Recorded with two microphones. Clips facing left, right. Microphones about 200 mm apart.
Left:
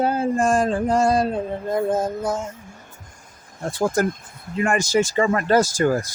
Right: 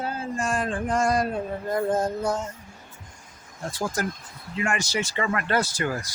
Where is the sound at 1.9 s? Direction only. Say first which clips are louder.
Left 2 dB; 5° left (ahead or behind).